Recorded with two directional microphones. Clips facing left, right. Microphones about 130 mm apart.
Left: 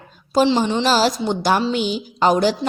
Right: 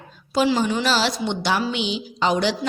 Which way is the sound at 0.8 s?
45° left (ahead or behind).